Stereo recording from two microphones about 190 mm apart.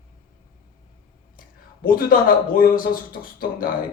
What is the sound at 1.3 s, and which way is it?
Speech, 50° left (ahead or behind).